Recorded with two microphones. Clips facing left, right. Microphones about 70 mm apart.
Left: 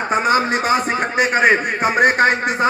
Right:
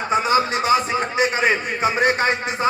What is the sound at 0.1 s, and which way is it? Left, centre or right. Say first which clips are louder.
A man's voice: left 2 dB; left.